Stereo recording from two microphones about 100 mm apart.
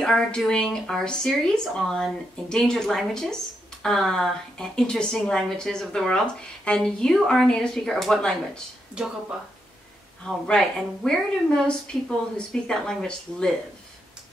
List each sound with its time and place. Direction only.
0.0 s speech: 5° left (ahead or behind)
9.0 s speech: 10° right (ahead or behind)
10.2 s speech: 5° left (ahead or behind)